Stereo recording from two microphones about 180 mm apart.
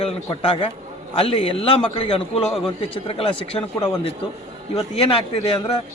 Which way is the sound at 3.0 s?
30° left (ahead or behind).